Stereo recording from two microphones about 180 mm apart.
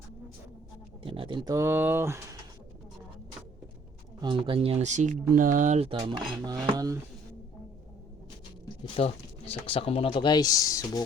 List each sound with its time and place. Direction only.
1.0 s speech: 30° right (ahead or behind); by 2.2 s 15° right (ahead or behind)
4.2 s speech: 25° right (ahead or behind)
9.0 s speech: 35° left (ahead or behind)